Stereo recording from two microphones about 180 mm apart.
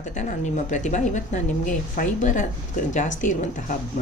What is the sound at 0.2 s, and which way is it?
A woman's voice, 40° left (ahead or behind).